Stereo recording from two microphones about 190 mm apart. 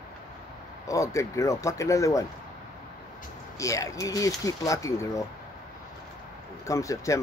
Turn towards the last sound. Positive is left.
turn(degrees=15)  # may be behind; listen again after turning